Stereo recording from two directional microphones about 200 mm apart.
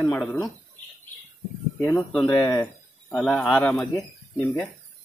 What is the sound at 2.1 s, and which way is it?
Speech, 20° left (ahead or behind).